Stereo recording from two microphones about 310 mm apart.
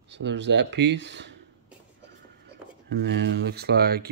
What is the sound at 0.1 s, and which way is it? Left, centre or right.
Speech, right.